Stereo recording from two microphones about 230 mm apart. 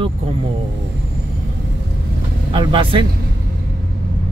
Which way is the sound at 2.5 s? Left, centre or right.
Right.